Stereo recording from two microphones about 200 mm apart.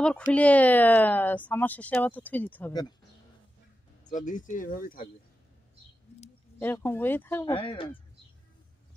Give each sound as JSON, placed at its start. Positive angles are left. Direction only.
{"t": 0.0, "sound": "speech", "side_deg": 5}
{"t": 4.1, "sound": "speech", "side_deg": 40}
{"t": 6.6, "sound": "speech", "side_deg": 10}
{"t": 7.5, "sound": "speech", "side_deg": 25}